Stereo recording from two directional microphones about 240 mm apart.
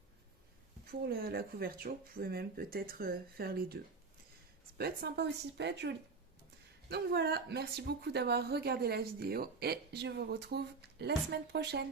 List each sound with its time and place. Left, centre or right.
0.9 s speech: right
4.8 s speech: right